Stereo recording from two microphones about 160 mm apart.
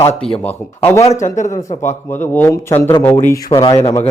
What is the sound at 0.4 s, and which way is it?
Speech, 15° left (ahead or behind).